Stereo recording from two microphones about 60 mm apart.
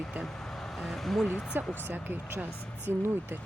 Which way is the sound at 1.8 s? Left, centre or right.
Right.